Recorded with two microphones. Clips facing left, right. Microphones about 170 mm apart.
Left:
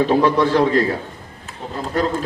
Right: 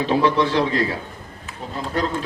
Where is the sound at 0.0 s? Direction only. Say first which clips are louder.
Left 3 dB; 50° left (ahead or behind).